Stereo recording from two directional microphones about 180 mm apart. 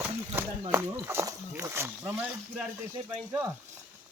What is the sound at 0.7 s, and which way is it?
Speech, 15° right (ahead or behind).